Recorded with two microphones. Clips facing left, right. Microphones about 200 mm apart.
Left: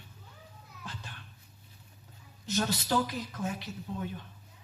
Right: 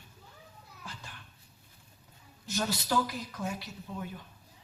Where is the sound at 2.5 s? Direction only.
20° left (ahead or behind).